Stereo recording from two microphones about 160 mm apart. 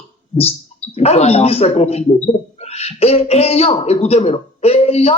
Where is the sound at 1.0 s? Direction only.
40° left (ahead or behind).